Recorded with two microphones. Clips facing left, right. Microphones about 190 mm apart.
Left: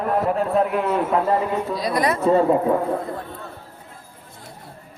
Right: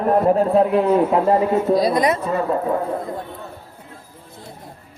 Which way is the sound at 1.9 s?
20° right (ahead or behind).